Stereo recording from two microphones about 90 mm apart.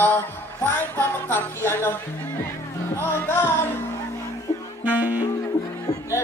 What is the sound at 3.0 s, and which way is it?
Speech, 25° left (ahead or behind).